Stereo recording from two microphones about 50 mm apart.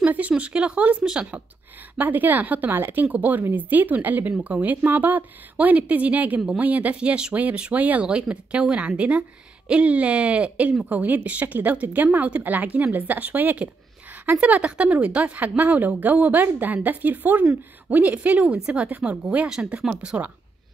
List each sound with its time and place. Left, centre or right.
0.0 s speech: right
1.0 s speech: centre
2.0 s a woman's voice: right
8.0 s speech: right
10.9 s a woman's voice: right